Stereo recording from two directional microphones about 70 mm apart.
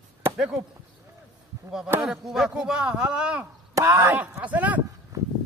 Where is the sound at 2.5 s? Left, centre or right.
Centre.